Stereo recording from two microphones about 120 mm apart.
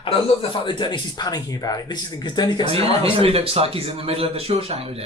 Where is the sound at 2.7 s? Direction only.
55° right (ahead or behind).